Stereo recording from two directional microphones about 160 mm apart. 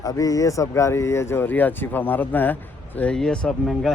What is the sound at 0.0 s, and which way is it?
Speech, 20° left (ahead or behind).